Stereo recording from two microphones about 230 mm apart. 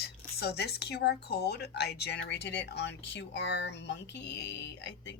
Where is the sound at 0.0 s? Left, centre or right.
Left.